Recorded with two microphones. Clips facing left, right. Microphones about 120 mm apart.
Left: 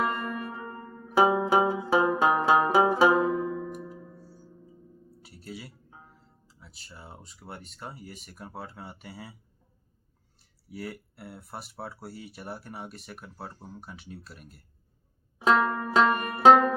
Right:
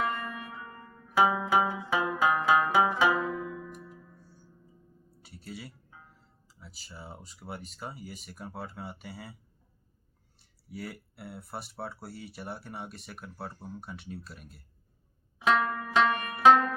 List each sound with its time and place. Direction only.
0.0 s music: 35° left (ahead or behind)
3.7 s music: 60° left (ahead or behind)
4.0 s music: 35° left (ahead or behind)
5.2 s a sound: centre (ahead or behind)
6.5 s speech: centre (ahead or behind)
10.7 s speech: centre (ahead or behind)
15.4 s banjo: 35° left (ahead or behind)